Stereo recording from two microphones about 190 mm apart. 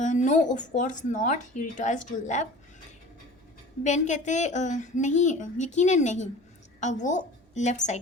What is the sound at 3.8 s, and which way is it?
A woman's voice, 40° left (ahead or behind).